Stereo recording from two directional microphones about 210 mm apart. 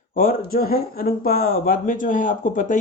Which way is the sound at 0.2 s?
45° left (ahead or behind).